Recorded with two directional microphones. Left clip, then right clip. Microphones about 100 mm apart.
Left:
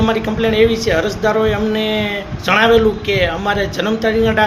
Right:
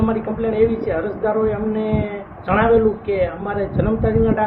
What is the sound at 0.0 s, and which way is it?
Speech, 10° left (ahead or behind).